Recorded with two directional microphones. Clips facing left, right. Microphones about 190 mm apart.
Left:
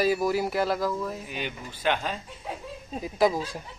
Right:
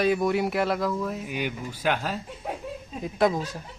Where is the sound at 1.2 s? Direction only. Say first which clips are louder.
Right 4 dB; 10° right (ahead or behind); by 3.6 s 5° left (ahead or behind).